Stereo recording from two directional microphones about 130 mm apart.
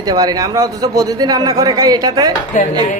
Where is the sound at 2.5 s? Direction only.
75° left (ahead or behind).